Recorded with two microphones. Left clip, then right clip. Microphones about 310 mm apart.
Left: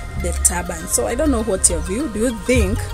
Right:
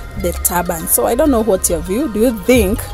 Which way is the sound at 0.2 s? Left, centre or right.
Centre.